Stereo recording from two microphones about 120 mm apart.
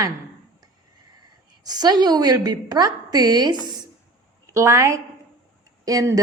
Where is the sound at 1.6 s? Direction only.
35° right (ahead or behind).